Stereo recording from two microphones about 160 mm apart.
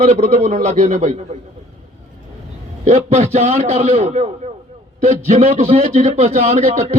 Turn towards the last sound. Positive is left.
turn(degrees=-40)  # may be behind; listen again after turning